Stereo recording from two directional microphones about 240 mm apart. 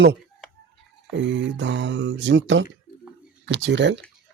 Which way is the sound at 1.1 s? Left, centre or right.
Right.